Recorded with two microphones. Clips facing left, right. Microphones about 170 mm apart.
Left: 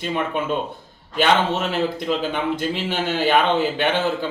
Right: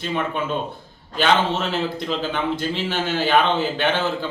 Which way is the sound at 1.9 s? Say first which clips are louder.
Left 2 dB; 10° left (ahead or behind).